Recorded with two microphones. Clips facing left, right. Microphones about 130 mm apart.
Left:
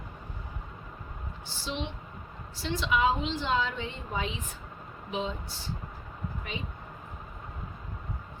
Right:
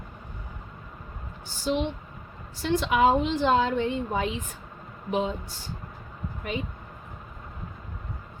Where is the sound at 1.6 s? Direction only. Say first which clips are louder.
Right 9 dB; 50° right (ahead or behind).